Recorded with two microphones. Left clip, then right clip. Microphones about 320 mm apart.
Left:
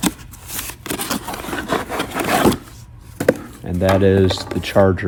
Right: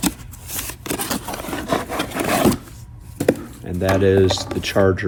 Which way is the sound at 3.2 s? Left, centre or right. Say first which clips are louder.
Left 2 dB; centre.